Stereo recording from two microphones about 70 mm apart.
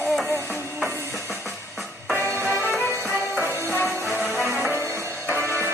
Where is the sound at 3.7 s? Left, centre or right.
Left.